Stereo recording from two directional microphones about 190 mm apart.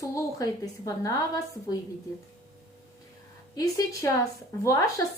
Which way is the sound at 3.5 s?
15° left (ahead or behind).